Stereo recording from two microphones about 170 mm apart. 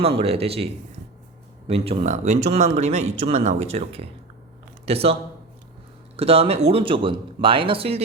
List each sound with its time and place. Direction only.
0.0 s speech: 35° right (ahead or behind)
6.1 s speech: 35° right (ahead or behind)